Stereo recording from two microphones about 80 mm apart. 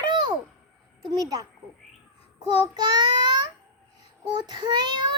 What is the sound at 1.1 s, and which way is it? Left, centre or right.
Speech, right.